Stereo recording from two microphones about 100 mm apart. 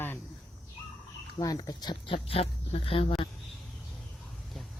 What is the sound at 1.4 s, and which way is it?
Speech, 40° left (ahead or behind).